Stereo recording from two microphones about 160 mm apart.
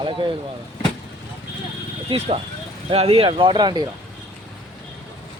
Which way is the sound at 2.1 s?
35° right (ahead or behind).